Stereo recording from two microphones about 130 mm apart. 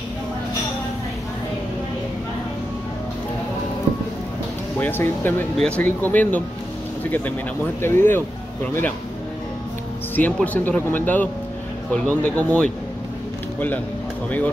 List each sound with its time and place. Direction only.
4.7 s speech: 15° left (ahead or behind)
7.8 s speech: 15° left (ahead or behind)
10.1 s speech: 10° left (ahead or behind)